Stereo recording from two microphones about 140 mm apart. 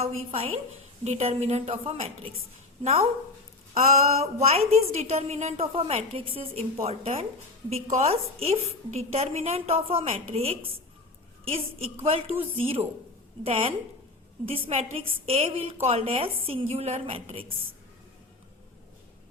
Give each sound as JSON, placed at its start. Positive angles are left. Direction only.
{"t": 0.0, "sound": "a woman's voice", "side_deg": -50}
{"t": 3.8, "sound": "a woman's voice", "side_deg": -50}